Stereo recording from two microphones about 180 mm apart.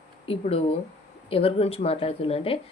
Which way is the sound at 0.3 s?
35° left (ahead or behind).